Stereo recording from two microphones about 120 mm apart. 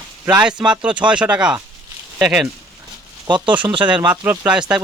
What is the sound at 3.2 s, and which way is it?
Speech, 40° right (ahead or behind).